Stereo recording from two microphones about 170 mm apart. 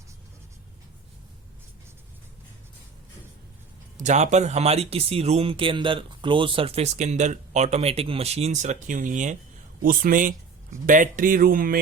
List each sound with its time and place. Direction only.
3.9 s speech: 45° right (ahead or behind)